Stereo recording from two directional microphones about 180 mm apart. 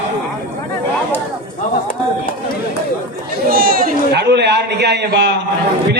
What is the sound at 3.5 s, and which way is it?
A man's voice, 55° right (ahead or behind).